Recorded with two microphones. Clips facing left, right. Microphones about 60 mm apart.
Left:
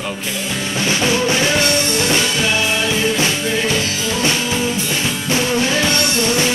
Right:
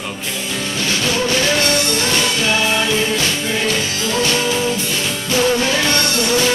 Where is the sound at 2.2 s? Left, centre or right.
Centre.